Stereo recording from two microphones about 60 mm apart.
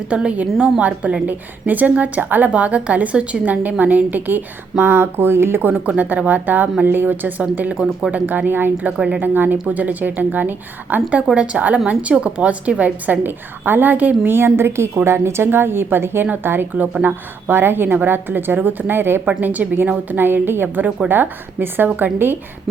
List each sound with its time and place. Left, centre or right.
0.1 s a woman's voice: centre
14.3 s a woman's voice: right
19.3 s a woman's voice: right